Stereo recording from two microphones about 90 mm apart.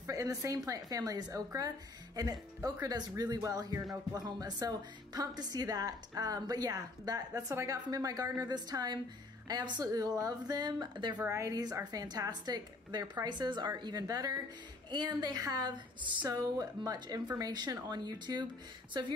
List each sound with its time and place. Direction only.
0.1 s a woman's voice: 35° right (ahead or behind)
2.6 s a woman's voice: 40° right (ahead or behind)
11.3 s a woman's voice: 40° right (ahead or behind)
16.3 s a woman's voice: 40° right (ahead or behind)